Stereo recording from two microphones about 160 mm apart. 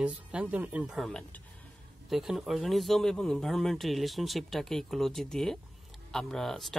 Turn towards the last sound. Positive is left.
turn(degrees=0)  # may be behind; listen again after turning